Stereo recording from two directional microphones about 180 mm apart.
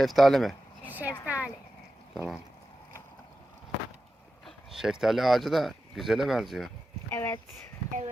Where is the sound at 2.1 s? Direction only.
5° right (ahead or behind).